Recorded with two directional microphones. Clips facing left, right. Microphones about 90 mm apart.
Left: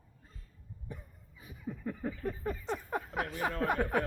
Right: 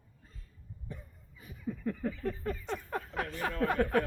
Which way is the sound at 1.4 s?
15° left (ahead or behind).